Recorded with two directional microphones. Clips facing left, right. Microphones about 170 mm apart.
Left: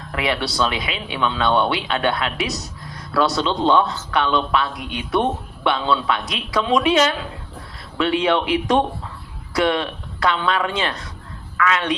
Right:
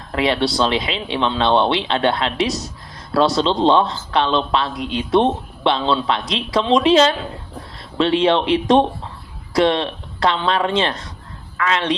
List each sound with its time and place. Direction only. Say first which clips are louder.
0.1 s a man's voice: right 5 dB; 25° right (ahead or behind)